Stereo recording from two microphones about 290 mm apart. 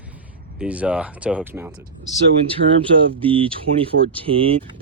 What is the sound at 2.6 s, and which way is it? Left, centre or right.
Speech, right.